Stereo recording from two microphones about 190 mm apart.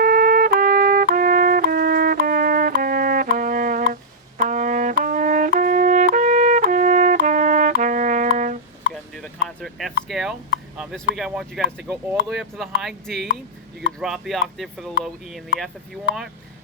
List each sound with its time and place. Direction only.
0.0 s music: 50° right (ahead or behind)
8.9 s a sound: 5° left (ahead or behind)
10.1 s speech: 5° right (ahead or behind)